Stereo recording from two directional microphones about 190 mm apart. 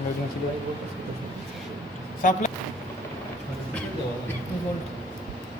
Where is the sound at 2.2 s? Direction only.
45° left (ahead or behind).